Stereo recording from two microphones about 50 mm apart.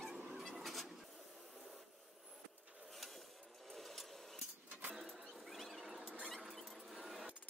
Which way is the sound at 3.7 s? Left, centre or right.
Centre.